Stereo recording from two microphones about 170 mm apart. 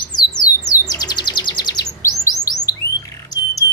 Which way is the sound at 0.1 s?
20° left (ahead or behind).